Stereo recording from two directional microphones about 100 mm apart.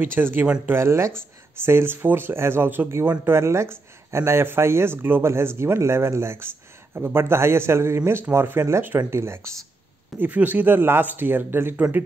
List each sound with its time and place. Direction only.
0.0 s speech: 20° right (ahead or behind)
10.1 s speech: 15° right (ahead or behind)